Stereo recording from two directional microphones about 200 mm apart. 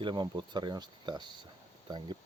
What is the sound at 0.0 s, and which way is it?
Speech, 20° right (ahead or behind).